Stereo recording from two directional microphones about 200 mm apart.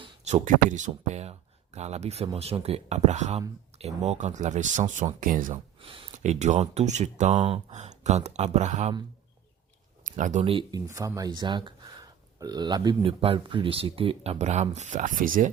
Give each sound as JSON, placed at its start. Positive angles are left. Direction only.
{"t": 0.0, "sound": "speech", "side_deg": -35}
{"t": 5.8, "sound": "speech", "side_deg": -25}
{"t": 10.1, "sound": "speech", "side_deg": -40}